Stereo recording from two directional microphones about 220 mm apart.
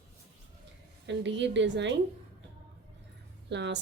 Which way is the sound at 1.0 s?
55° right (ahead or behind).